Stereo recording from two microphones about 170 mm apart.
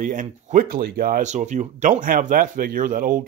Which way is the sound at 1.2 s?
45° right (ahead or behind).